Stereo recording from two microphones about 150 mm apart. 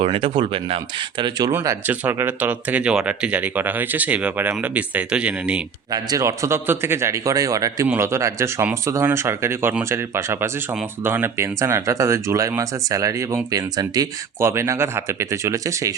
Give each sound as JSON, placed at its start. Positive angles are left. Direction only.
{"t": 0.0, "sound": "speech", "side_deg": -35}
{"t": 1.5, "sound": "speech", "side_deg": -15}
{"t": 5.9, "sound": "speech", "side_deg": -25}